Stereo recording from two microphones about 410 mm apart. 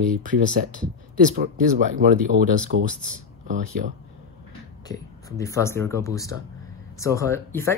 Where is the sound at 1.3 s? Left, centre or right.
Centre.